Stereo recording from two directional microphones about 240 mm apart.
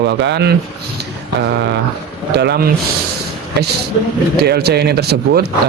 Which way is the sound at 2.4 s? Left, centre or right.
Right.